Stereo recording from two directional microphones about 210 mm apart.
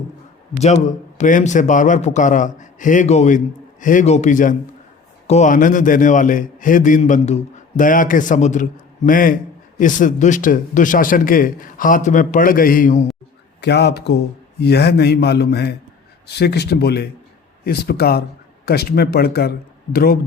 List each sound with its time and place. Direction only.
0.5 s a man's voice: 35° left (ahead or behind)
13.6 s a man's voice: 55° left (ahead or behind)